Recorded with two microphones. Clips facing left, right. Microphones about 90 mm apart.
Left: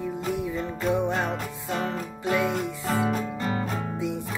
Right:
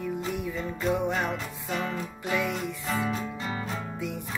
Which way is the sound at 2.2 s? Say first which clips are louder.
Left 4 dB; 25° left (ahead or behind).